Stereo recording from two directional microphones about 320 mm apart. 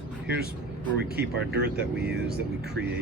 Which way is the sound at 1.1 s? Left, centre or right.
Right.